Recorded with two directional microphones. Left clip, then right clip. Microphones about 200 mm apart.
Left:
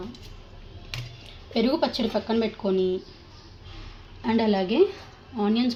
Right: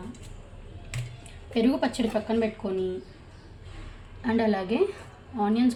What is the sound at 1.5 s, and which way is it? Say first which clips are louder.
Speech: left 2 dB; 25° left (ahead or behind).